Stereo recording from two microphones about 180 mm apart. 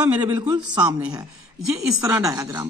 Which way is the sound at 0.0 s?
10° right (ahead or behind).